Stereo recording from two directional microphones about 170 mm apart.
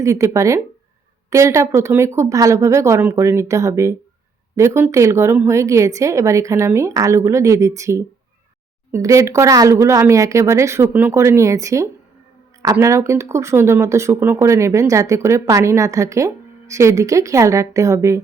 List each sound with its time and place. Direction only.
0.0 s speech: 20° right (ahead or behind)